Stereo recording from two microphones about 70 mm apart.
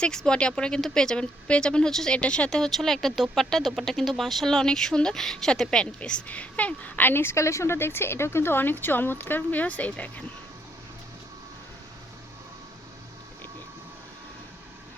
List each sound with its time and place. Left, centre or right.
0.0 s speech: centre